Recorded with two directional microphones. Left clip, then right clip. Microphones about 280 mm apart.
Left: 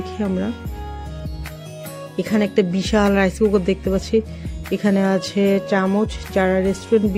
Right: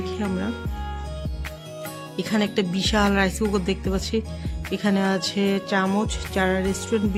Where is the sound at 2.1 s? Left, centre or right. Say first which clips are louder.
Left 6 dB; centre.